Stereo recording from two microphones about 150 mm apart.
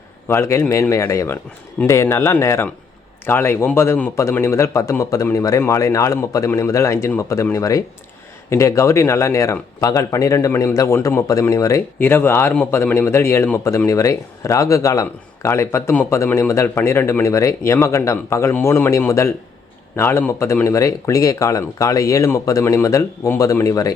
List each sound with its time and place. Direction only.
0.3 s speech: 20° left (ahead or behind)